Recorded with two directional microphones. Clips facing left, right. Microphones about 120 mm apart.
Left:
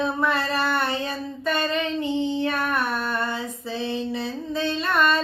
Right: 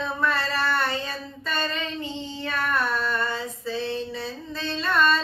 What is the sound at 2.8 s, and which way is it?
Mantra, 20° left (ahead or behind).